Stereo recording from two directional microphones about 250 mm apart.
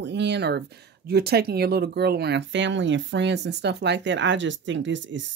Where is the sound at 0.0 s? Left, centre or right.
Right.